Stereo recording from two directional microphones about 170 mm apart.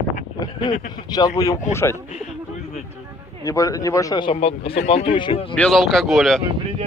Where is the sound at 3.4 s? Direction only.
20° left (ahead or behind).